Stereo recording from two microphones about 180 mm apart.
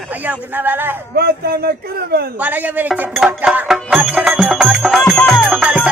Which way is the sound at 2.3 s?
10° right (ahead or behind).